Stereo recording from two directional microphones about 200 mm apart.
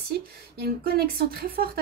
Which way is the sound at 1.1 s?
50° right (ahead or behind).